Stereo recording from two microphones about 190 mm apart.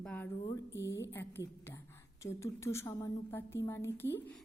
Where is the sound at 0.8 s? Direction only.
65° left (ahead or behind).